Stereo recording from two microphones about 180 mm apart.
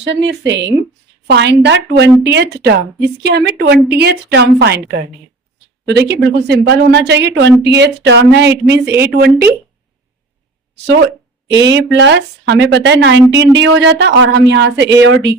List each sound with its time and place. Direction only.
0.0 s a woman's voice: 80° right; by 9.5 s 60° right (ahead or behind)
11.4 s a woman's voice: 75° right (ahead or behind)